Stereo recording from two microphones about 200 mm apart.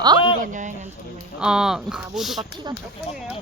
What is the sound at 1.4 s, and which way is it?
Speech, 5° right (ahead or behind).